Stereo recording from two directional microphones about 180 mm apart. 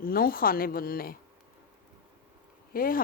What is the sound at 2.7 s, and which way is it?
Speech, 55° left (ahead or behind).